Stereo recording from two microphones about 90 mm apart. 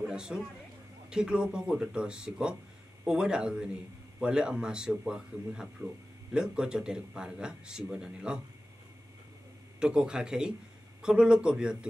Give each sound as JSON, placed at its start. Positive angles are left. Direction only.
{"t": 0.0, "sound": "a sound", "side_deg": -10}
{"t": 1.1, "sound": "speech", "side_deg": -10}
{"t": 9.8, "sound": "speech", "side_deg": -10}